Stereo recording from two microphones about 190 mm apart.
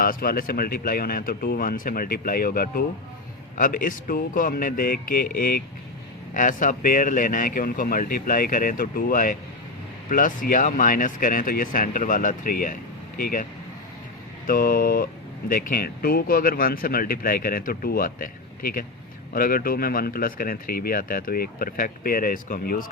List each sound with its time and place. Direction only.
0.0 s speech: 50° left (ahead or behind)